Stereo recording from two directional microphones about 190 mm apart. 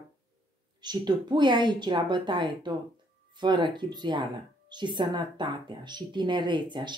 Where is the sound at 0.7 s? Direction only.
20° right (ahead or behind).